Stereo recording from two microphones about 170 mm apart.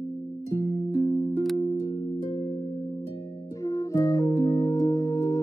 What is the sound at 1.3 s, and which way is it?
Music, centre (ahead or behind).